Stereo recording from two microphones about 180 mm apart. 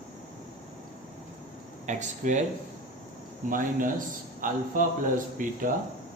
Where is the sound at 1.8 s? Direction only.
40° right (ahead or behind).